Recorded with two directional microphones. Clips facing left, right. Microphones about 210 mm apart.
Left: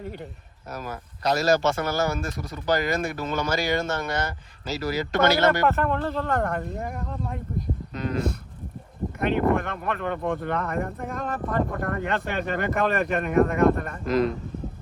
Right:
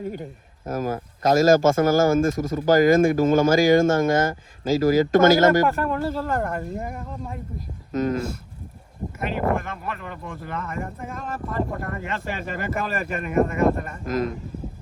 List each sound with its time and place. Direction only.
0.7 s speech: 45° right (ahead or behind)
5.6 s speech: 10° right (ahead or behind)
7.9 s speech: 45° right (ahead or behind)
9.1 s speech: 5° right (ahead or behind)
14.0 s speech: 45° right (ahead or behind)